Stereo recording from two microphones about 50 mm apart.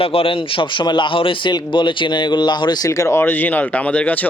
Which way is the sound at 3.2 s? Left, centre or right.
Left.